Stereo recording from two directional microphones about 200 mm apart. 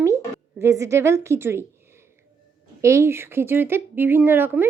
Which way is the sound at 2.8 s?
15° right (ahead or behind).